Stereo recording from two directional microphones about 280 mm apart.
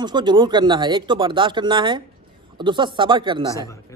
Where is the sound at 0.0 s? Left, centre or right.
Centre.